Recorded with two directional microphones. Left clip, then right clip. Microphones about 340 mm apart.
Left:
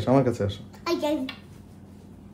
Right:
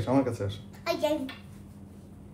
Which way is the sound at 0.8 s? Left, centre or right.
Centre.